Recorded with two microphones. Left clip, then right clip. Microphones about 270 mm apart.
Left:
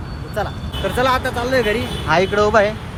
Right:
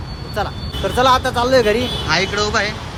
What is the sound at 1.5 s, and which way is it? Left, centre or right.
Speech, right.